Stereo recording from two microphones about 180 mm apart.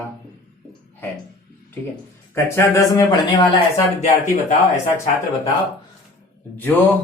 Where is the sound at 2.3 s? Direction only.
15° left (ahead or behind).